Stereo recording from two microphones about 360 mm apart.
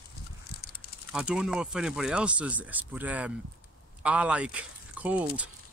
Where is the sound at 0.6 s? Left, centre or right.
Left.